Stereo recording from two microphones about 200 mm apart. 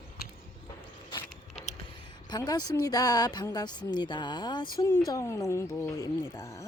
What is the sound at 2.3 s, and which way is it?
Speech, 20° left (ahead or behind).